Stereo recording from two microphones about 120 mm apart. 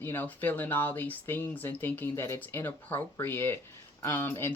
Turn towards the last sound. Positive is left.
turn(degrees=20)  # may be behind; listen again after turning